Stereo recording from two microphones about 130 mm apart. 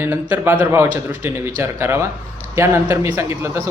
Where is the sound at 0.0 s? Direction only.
20° right (ahead or behind).